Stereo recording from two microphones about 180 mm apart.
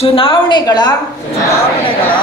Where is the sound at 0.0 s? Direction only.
30° left (ahead or behind).